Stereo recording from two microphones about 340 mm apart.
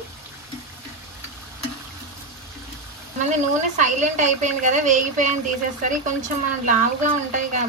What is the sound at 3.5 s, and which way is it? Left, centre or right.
A woman's voice, right.